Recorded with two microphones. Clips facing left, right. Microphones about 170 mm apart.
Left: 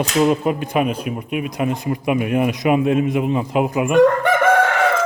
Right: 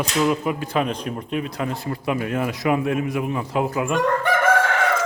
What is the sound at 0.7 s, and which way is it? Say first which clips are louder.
Speech: left 3 dB; 10° left (ahead or behind).